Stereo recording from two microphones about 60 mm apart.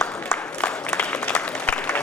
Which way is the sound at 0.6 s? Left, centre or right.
Centre.